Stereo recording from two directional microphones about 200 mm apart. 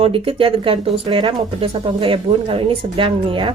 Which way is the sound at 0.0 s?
30° right (ahead or behind).